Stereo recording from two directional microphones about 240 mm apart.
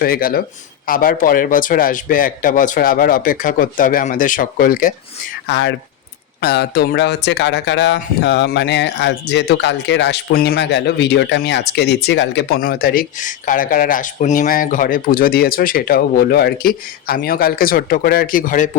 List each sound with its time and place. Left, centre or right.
0.0 s speech: left
5.5 s speech: left